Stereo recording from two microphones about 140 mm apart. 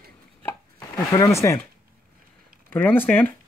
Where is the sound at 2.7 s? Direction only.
15° left (ahead or behind).